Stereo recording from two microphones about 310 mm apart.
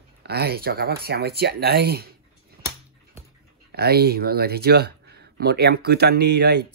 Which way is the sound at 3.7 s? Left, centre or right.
Right.